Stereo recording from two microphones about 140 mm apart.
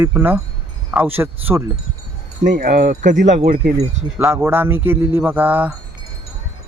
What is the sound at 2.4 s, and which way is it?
Speech, 65° right (ahead or behind).